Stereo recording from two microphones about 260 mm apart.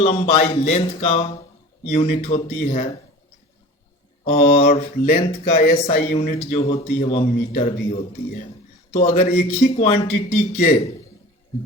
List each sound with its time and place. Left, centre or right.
0.0 s speech: left
4.2 s speech: left